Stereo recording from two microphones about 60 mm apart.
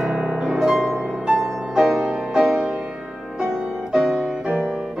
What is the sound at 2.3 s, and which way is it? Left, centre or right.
Music, centre.